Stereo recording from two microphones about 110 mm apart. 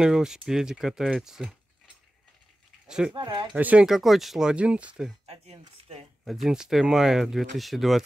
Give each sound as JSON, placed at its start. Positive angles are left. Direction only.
{"t": 0.0, "sound": "speech", "side_deg": -5}
{"t": 2.9, "sound": "speech", "side_deg": -5}
{"t": 3.2, "sound": "speech", "side_deg": -40}
{"t": 3.5, "sound": "speech", "side_deg": -10}
{"t": 5.2, "sound": "speech", "side_deg": -65}
{"t": 6.2, "sound": "speech", "side_deg": 0}